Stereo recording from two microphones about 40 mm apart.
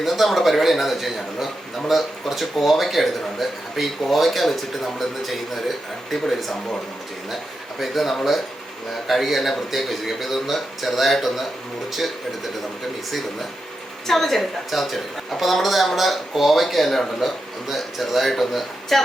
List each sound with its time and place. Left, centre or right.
0.0 s a man's voice: centre
7.8 s a man's voice: centre
14.1 s a man's voice: centre